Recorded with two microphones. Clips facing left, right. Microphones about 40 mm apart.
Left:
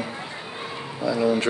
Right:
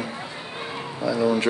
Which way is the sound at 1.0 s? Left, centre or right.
Centre.